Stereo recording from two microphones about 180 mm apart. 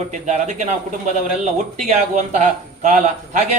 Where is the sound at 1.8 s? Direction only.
40° right (ahead or behind).